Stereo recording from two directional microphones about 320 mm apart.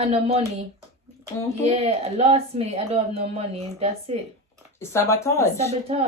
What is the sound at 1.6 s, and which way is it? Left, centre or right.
Speech, centre.